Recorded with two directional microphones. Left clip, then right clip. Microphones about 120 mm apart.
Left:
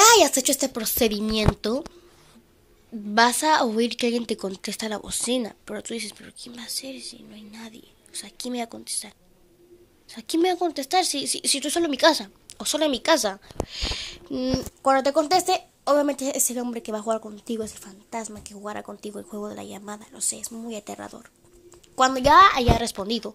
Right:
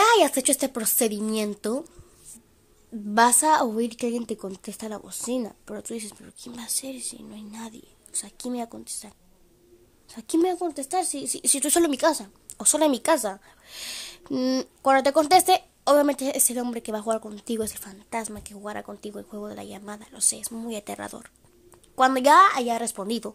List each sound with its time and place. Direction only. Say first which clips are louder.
0.0 s speech: left 3 dB; centre (ahead or behind)
3.4 s speech: even; 20° right (ahead or behind)
3.7 s speech: left 4 dB; 10° right (ahead or behind)
6.3 s speech: right 2 dB; 30° right (ahead or behind)
10.4 s speech: left 5 dB; 10° right (ahead or behind)
11.3 s speech: right 2 dB; 25° right (ahead or behind)
11.9 s speech: left 4 dB; 10° right (ahead or behind)
12.5 s speech: right 1 dB; 25° right (ahead or behind)
13.1 s speech: left 2 dB; 10° right (ahead or behind)
13.7 s speech: left 2 dB; 20° right (ahead or behind)
14.2 s speech: right 3 dB; 30° right (ahead or behind)
14.8 s speech: right 1 dB; 10° right (ahead or behind)
17.3 s speech: right 1 dB; 10° right (ahead or behind)